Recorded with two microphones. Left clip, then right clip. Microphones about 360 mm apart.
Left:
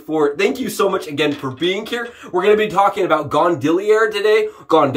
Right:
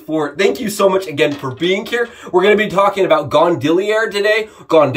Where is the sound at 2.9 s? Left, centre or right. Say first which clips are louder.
Right 4 dB; centre.